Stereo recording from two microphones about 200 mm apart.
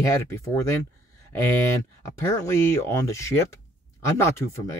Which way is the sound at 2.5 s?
15° left (ahead or behind).